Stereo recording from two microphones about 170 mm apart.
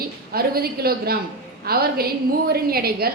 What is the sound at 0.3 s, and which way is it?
A woman's voice, 65° right (ahead or behind).